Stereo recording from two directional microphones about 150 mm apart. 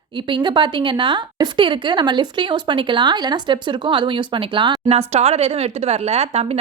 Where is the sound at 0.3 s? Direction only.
30° right (ahead or behind).